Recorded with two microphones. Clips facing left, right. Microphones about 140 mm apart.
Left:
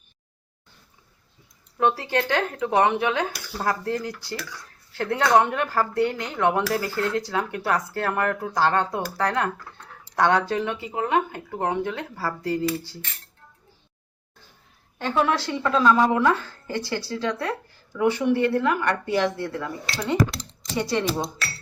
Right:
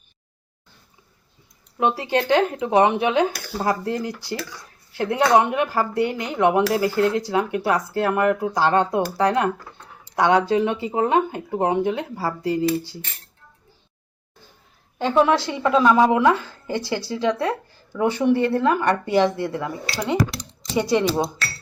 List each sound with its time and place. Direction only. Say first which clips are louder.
1.8 s speech: right 2 dB; 20° right (ahead or behind)
14.9 s speech: right 5 dB; 20° right (ahead or behind)
20.7 s speech: right 5 dB; 15° right (ahead or behind)